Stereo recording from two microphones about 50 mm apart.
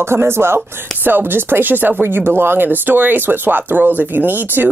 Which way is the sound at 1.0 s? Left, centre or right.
Right.